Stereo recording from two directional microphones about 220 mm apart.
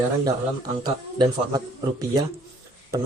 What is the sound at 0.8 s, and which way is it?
Speech, 20° right (ahead or behind).